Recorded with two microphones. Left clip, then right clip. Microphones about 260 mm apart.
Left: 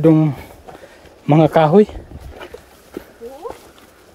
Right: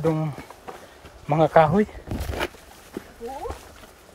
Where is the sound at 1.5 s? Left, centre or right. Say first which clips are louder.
Left 4 dB; left.